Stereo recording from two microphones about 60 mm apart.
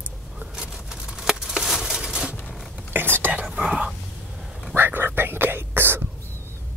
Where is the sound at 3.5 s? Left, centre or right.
Centre.